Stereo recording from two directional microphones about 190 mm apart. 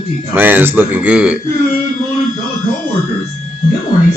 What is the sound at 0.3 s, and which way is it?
A man's voice, 10° right (ahead or behind).